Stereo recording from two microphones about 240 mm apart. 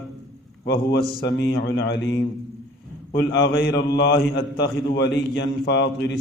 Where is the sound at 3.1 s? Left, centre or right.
Left.